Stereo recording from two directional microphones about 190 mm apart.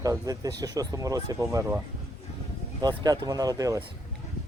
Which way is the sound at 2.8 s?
20° right (ahead or behind).